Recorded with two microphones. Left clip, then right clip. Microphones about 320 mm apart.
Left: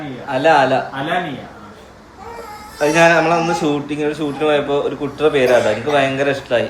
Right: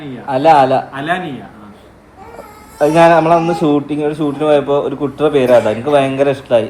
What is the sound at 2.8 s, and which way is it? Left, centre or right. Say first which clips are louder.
Speech: right 3 dB; centre.